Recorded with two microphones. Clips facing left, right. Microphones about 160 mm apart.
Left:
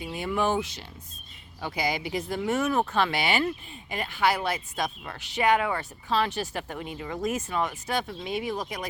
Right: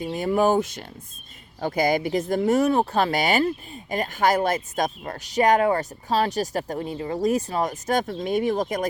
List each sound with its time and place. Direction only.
0.0 s speech: 40° right (ahead or behind)